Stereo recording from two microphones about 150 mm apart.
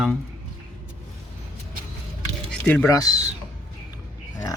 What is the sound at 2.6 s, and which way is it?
Speech, 10° left (ahead or behind).